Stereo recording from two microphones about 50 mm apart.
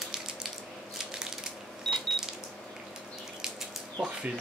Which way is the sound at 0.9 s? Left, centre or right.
Centre.